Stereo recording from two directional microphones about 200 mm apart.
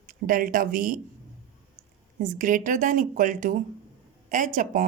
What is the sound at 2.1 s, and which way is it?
Speech, 40° right (ahead or behind).